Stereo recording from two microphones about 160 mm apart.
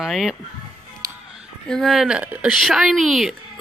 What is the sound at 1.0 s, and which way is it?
Music, 20° right (ahead or behind).